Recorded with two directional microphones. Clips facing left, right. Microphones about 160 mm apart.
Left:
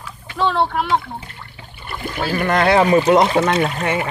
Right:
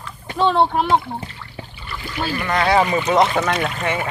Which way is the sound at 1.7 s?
50° left (ahead or behind).